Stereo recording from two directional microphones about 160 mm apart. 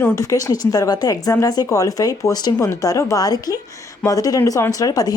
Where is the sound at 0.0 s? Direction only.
20° left (ahead or behind).